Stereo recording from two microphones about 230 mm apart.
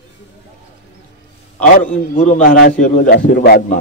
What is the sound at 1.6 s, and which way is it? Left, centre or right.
A man's voice, left.